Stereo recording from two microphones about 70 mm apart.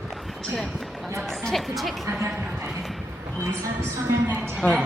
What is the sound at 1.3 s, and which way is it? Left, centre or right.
Speech, centre.